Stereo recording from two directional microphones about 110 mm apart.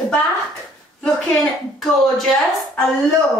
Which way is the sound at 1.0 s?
Centre (ahead or behind).